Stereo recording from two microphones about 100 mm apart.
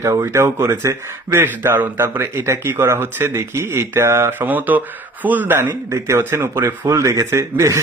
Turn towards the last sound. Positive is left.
turn(degrees=-30)  # may be behind; listen again after turning